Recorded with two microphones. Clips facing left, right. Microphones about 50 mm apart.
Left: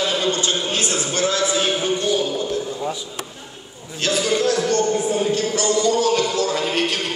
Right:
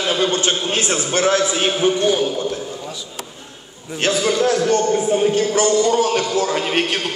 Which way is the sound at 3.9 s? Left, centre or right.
Right.